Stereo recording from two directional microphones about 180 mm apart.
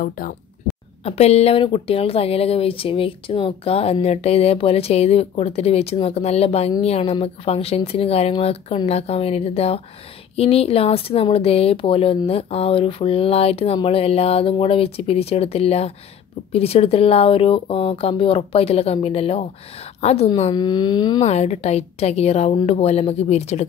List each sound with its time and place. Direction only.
1.0 s a woman's voice: 35° left (ahead or behind)
20.5 s a sound: 25° left (ahead or behind)
21.2 s speech: 35° left (ahead or behind)